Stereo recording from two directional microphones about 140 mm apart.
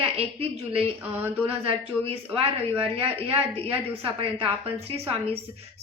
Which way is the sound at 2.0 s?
40° right (ahead or behind).